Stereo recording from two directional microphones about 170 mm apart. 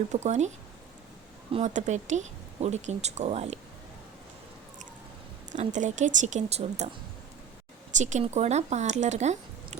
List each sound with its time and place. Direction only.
0.1 s speech: 45° right (ahead or behind)
1.5 s speech: 45° right (ahead or behind)
5.5 s speech: 45° right (ahead or behind)
7.9 s speech: 45° right (ahead or behind)